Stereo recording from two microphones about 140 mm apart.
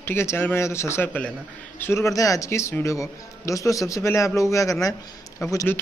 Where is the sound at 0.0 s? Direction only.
15° left (ahead or behind).